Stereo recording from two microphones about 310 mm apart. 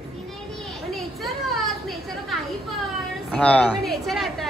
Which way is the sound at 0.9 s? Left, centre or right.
Centre.